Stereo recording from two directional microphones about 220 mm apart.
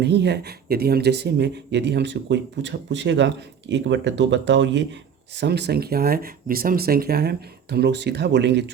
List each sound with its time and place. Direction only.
0.0 s speech: 50° right (ahead or behind)